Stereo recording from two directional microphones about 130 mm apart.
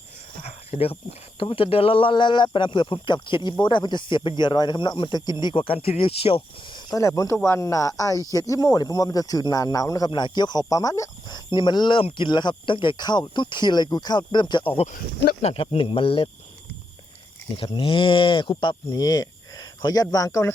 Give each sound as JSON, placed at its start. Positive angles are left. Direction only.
{"t": 0.4, "sound": "speech", "side_deg": 50}
{"t": 6.9, "sound": "speech", "side_deg": 25}
{"t": 15.4, "sound": "speech", "side_deg": 50}
{"t": 17.6, "sound": "speech", "side_deg": 40}